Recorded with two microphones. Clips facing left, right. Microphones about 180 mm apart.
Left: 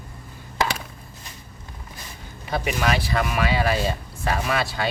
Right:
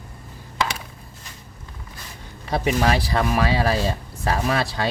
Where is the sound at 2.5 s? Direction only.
30° right (ahead or behind).